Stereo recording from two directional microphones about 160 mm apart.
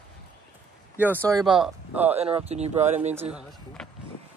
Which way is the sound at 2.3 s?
40° right (ahead or behind).